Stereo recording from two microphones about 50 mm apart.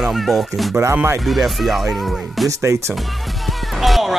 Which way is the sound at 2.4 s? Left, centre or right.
Right.